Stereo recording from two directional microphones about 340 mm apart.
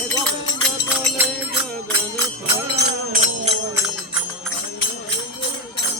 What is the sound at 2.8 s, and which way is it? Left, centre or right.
Music, right.